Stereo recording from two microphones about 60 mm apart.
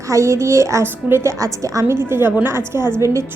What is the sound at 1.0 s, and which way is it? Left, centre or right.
Speech, right.